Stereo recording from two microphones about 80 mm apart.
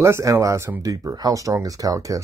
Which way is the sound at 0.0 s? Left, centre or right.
Right.